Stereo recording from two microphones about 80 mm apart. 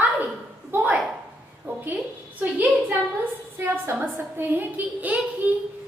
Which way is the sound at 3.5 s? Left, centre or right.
Right.